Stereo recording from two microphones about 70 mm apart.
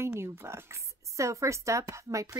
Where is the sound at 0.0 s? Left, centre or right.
Right.